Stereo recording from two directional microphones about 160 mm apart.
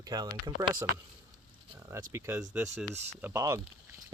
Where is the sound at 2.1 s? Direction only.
15° right (ahead or behind).